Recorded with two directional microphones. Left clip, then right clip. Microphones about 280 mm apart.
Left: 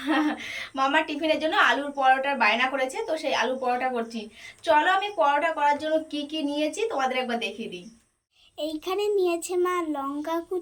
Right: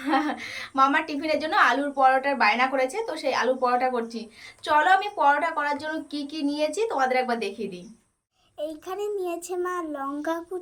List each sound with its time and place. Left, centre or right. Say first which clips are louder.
0.3 s a woman's voice: right 5 dB; centre
8.5 s child singing: left 3 dB; right